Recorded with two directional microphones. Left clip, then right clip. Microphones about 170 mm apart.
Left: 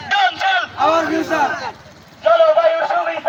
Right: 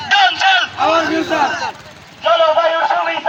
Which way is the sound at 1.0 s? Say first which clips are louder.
Right 2 dB; 30° left (ahead or behind).